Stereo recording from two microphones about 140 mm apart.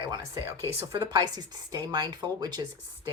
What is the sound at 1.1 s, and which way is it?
Speech, 30° right (ahead or behind).